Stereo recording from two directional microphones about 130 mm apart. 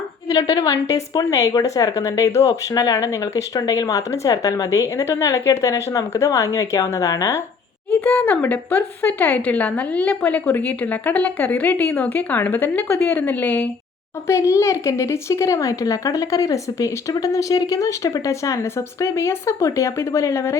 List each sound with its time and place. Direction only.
0.3 s a woman's voice: 30° left (ahead or behind)
8.0 s a woman's voice: 10° left (ahead or behind)
14.3 s a woman's voice: 25° left (ahead or behind)